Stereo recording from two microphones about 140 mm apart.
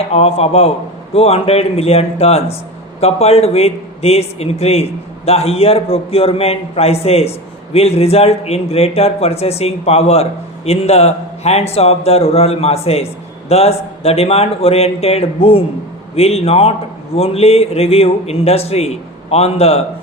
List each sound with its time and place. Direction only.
0.1 s speech: 45° left (ahead or behind)